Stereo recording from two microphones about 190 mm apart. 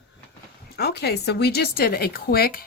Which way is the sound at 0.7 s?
60° left (ahead or behind).